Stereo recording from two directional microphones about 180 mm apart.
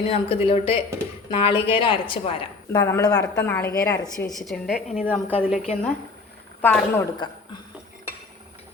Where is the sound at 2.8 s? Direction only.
15° left (ahead or behind).